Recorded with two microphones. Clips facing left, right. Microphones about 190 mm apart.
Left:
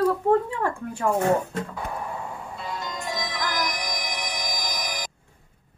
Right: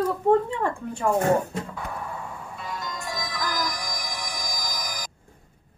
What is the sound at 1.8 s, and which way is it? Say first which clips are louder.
Music: left 2 dB; 25° left (ahead or behind).